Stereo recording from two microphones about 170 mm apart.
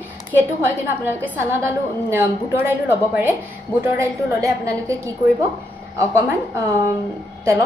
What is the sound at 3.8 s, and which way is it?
A woman's voice, 20° right (ahead or behind).